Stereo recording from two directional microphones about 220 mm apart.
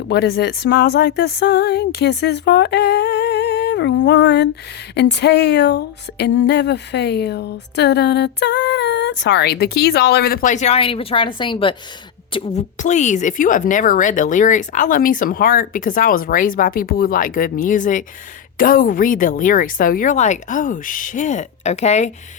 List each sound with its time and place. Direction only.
0.1 s speech: 45° left (ahead or behind); by 22.1 s 30° left (ahead or behind)